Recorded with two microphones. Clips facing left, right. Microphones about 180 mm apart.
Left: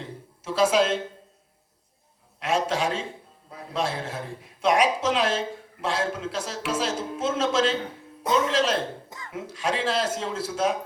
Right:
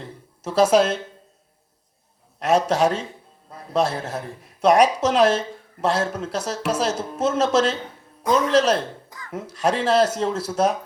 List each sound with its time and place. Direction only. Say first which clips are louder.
0.4 s speech: right 4 dB; 40° right (ahead or behind)
2.4 s a man's voice: right 6 dB; 40° right (ahead or behind)
9.0 s a sound: even; 25° left (ahead or behind)
9.3 s speech: right 6 dB; 40° right (ahead or behind)